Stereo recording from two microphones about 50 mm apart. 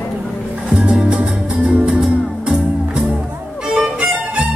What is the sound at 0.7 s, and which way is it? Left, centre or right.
Music, centre.